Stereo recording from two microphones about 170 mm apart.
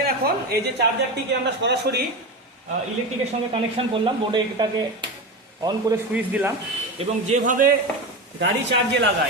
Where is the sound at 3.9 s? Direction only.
25° right (ahead or behind).